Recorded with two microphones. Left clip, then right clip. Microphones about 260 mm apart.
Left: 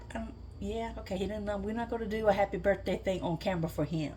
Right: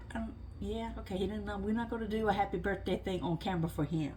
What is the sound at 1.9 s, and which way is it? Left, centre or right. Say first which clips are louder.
Speech: left 5 dB; centre.